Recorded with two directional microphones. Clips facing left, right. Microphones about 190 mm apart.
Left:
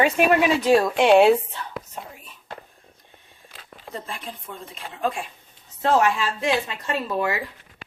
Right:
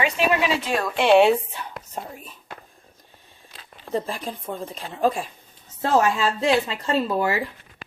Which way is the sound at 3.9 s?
35° right (ahead or behind).